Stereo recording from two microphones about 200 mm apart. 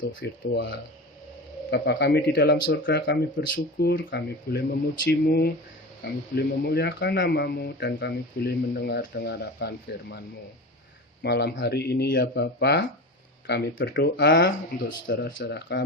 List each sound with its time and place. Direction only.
0.1 s speech: 65° left (ahead or behind)
3.5 s speech: 50° left (ahead or behind)
3.9 s speech: 65° left (ahead or behind)